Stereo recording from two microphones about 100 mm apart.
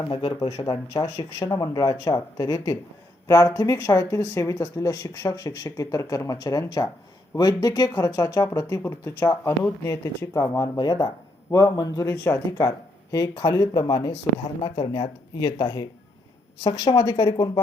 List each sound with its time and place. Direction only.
0.1 s speech: 50° left (ahead or behind)
0.6 s speech: 35° left (ahead or behind)
10.8 s speech: 45° left (ahead or behind)
12.1 s speech: 25° left (ahead or behind); by 17.6 s 45° left (ahead or behind)